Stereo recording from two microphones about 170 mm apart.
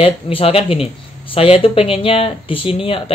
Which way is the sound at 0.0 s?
35° left (ahead or behind).